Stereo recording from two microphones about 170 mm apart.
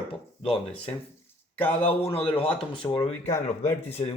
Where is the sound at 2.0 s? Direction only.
35° left (ahead or behind).